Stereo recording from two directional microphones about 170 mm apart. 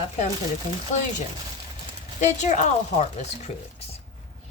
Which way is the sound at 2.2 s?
45° left (ahead or behind).